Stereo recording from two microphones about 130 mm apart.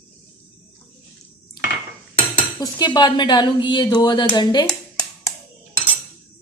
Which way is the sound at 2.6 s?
35° left (ahead or behind).